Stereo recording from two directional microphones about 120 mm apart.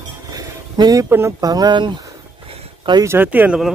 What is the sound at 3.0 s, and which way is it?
Speech, 15° right (ahead or behind).